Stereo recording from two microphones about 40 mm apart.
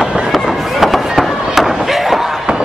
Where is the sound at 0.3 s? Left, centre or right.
Centre.